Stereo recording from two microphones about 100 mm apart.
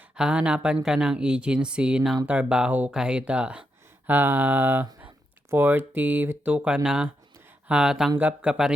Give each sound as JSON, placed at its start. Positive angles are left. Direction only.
{"t": 0.2, "sound": "speech", "side_deg": -10}